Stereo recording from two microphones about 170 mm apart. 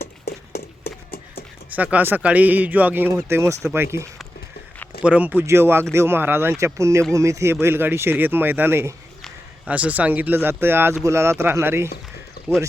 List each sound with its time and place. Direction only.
0.0 s a sound: 65° left (ahead or behind)
1.7 s speech: 10° right (ahead or behind)
5.0 s speech: 10° right (ahead or behind)